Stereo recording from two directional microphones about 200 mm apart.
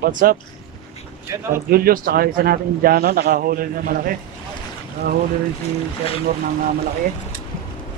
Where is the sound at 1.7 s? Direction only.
50° right (ahead or behind).